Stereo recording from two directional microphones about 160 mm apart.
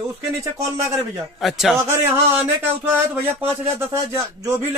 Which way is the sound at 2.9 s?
10° right (ahead or behind).